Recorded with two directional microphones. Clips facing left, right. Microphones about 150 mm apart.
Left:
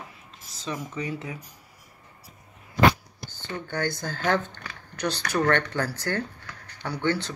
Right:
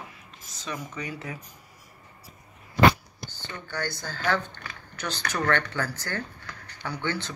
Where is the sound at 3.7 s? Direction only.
50° left (ahead or behind).